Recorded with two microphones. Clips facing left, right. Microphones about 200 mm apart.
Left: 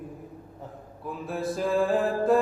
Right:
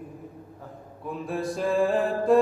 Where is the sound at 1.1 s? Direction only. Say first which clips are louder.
Right 1 dB; centre (ahead or behind).